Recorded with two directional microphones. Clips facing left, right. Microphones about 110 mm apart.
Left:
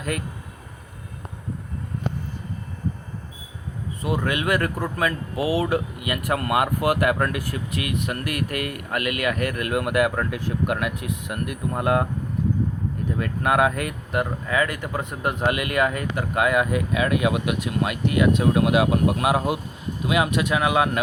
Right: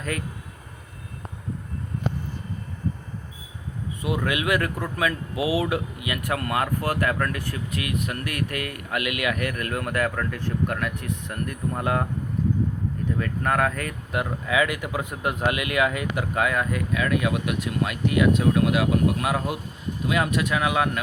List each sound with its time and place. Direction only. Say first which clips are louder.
4.3 s speech: left 1 dB; 5° right (ahead or behind)
13.1 s speech: left 4 dB; 10° left (ahead or behind)
16.7 s speech: left 2 dB; 15° left (ahead or behind)
18.5 s speech: left 2 dB; 20° left (ahead or behind)